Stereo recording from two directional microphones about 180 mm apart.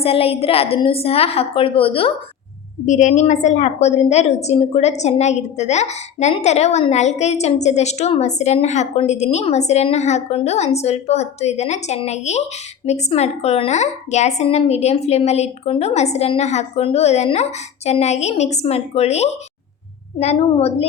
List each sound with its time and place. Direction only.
0.0 s a woman's voice: 30° left (ahead or behind)
2.8 s a woman's voice: 40° left (ahead or behind)